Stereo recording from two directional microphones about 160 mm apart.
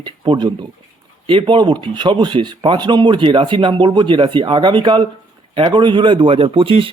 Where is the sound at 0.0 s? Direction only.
30° right (ahead or behind).